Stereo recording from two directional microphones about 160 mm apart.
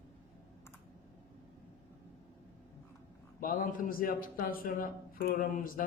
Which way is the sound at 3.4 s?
60° left (ahead or behind).